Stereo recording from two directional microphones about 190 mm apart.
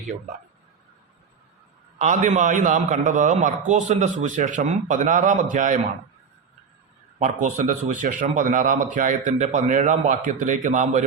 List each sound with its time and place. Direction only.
2.0 s a man's voice: 40° right (ahead or behind)
7.2 s a man's voice: 40° right (ahead or behind)